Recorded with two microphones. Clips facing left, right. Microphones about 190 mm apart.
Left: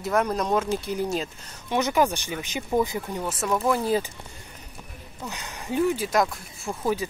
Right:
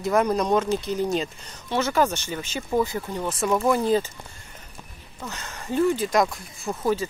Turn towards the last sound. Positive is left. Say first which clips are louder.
# right 2 dB
turn(degrees=10)  # may be behind; listen again after turning